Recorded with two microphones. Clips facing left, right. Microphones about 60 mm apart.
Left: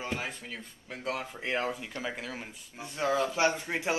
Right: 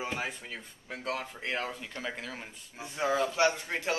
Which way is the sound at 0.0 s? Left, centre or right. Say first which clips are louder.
Even; centre.